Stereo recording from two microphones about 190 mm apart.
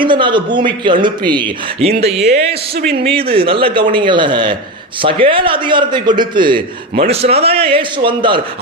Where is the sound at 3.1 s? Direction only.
30° right (ahead or behind).